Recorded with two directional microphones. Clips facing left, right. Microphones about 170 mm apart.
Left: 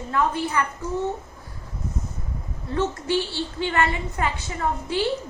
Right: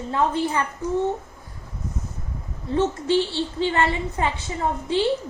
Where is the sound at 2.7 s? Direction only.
25° right (ahead or behind).